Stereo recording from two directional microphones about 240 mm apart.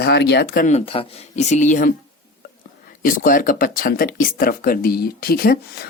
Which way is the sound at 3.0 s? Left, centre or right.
Left.